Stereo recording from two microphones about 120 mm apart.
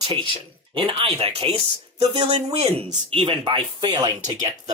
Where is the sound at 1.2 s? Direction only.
55° right (ahead or behind).